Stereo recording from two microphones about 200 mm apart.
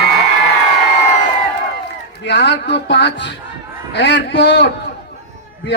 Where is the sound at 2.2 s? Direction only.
60° left (ahead or behind).